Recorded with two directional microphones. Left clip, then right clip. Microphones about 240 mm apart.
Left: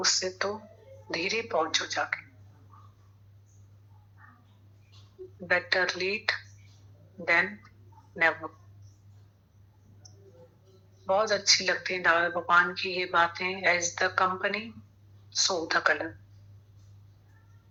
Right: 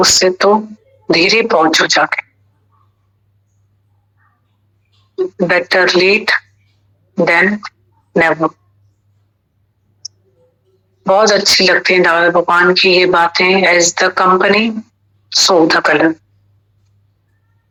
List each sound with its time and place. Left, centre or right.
0.0 s speech: right
5.4 s speech: right
11.0 s speech: right